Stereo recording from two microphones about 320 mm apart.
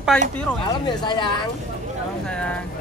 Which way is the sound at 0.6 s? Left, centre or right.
Centre.